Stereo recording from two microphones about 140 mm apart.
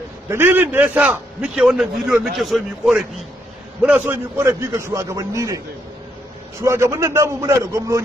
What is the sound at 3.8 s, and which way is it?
A man's voice, 10° right (ahead or behind).